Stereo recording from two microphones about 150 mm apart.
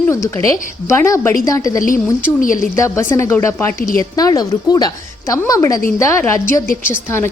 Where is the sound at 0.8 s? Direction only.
20° left (ahead or behind).